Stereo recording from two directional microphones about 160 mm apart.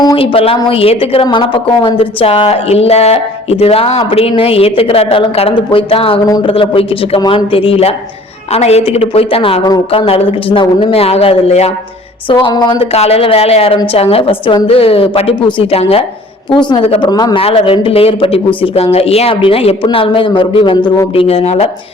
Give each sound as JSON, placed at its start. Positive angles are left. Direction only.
{"t": 0.2, "sound": "a woman's voice", "side_deg": 35}
{"t": 6.2, "sound": "a woman's voice", "side_deg": 25}
{"t": 6.5, "sound": "a woman's voice", "side_deg": 35}
{"t": 12.3, "sound": "a woman's voice", "side_deg": 30}
{"t": 12.8, "sound": "a woman's voice", "side_deg": 40}
{"t": 17.4, "sound": "a woman's voice", "side_deg": 35}